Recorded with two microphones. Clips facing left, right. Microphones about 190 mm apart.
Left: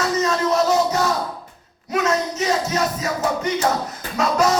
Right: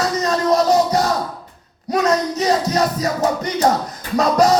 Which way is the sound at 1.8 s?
35° right (ahead or behind).